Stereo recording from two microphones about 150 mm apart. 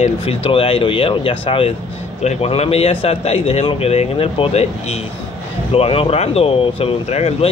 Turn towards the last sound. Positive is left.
turn(degrees=45)  # may be behind; listen again after turning